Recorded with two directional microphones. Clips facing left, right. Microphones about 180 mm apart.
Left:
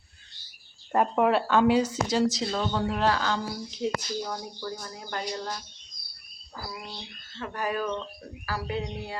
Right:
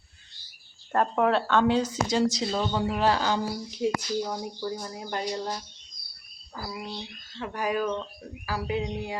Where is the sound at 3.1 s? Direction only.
20° right (ahead or behind).